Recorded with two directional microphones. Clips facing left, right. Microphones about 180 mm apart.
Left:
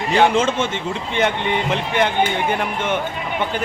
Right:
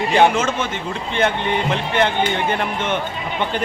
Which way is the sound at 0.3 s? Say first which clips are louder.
Left 3 dB; 25° left (ahead or behind).